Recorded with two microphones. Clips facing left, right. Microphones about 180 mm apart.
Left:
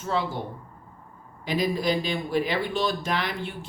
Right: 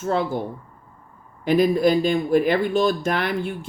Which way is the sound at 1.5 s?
50° right (ahead or behind).